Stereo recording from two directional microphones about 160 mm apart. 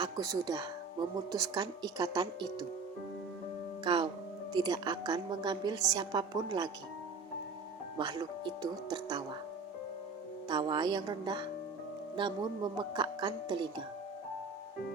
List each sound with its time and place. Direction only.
0.0 s speech: 25° right (ahead or behind)
3.8 s speech: 30° right (ahead or behind)
7.9 s speech: 25° right (ahead or behind)
10.5 s speech: 30° right (ahead or behind)